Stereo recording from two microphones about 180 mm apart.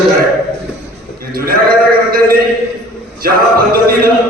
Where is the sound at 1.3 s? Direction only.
55° right (ahead or behind).